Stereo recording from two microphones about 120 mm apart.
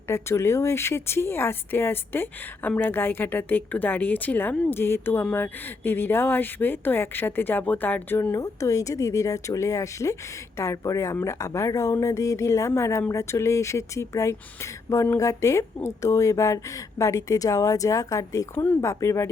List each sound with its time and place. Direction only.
0.1 s speech: 20° left (ahead or behind)
18.5 s speech: 15° left (ahead or behind)
18.9 s speech: 25° left (ahead or behind)